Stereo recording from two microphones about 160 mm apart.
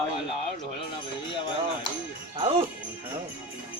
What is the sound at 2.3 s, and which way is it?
Speech, 35° right (ahead or behind).